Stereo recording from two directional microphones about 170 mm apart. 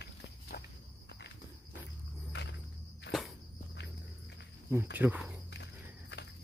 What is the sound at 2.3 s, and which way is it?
Cricket, 90° left.